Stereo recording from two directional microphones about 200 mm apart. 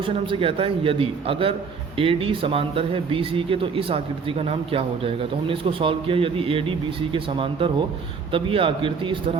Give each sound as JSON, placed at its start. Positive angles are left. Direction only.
{"t": 0.0, "sound": "speech", "side_deg": -25}